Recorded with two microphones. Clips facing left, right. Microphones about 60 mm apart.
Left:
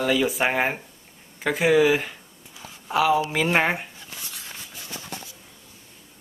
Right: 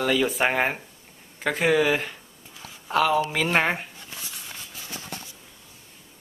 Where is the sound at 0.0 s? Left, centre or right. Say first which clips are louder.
Even; centre.